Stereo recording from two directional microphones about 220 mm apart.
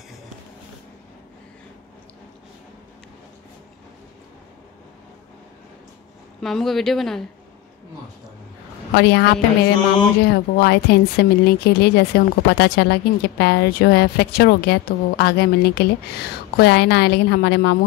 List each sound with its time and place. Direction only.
6.4 s speech: centre (ahead or behind)
8.9 s speech: 50° left (ahead or behind)